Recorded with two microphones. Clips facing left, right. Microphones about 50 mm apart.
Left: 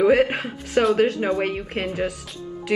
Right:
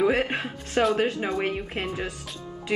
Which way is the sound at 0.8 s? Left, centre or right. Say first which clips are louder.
Left 5 dB; centre.